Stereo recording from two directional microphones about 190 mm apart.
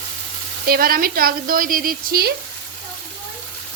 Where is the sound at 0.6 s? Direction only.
50° right (ahead or behind).